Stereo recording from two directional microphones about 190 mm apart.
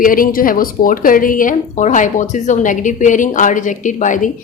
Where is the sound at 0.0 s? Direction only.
45° left (ahead or behind).